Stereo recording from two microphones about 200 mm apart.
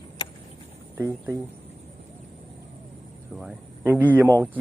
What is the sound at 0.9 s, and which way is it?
Speech, 10° right (ahead or behind).